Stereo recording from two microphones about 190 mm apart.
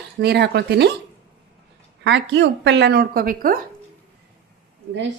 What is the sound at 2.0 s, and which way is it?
A woman's voice, 70° right (ahead or behind).